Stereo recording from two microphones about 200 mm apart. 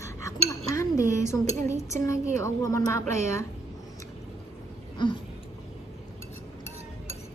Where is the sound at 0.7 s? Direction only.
15° left (ahead or behind).